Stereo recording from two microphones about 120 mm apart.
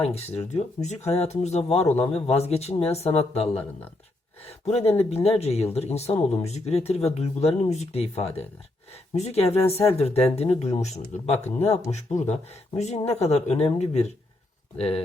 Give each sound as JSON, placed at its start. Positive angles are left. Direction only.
{"t": 0.1, "sound": "speech", "side_deg": 65}
{"t": 4.6, "sound": "speech", "side_deg": 60}
{"t": 14.8, "sound": "speech", "side_deg": 50}